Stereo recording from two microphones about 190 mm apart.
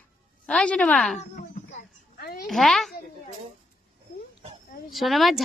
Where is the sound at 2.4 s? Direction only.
Centre (ahead or behind).